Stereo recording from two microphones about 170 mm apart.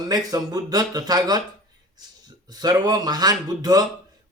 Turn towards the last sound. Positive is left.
turn(degrees=-20)  # may be behind; listen again after turning